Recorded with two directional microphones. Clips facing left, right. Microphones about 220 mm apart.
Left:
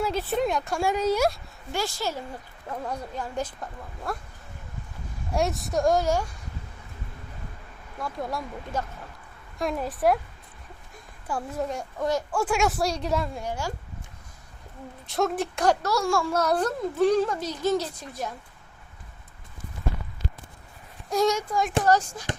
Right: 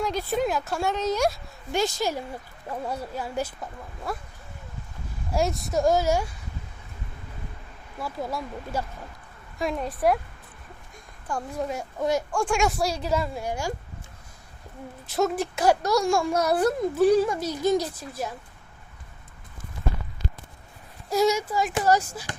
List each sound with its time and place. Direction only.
0.0 s a woman's voice: 5° left (ahead or behind)
0.9 s speech: 10° left (ahead or behind)
1.7 s speech: 20° right (ahead or behind); by 4.2 s centre (ahead or behind)
5.3 s a woman's voice: centre (ahead or behind)
7.9 s a woman's voice: 5° right (ahead or behind)
11.3 s a woman's voice: 5° left (ahead or behind)
12.3 s a woman's voice: 5° left (ahead or behind); by 13.7 s 15° right (ahead or behind)
15.0 s speech: centre (ahead or behind)
21.1 s a woman's voice: 5° right (ahead or behind)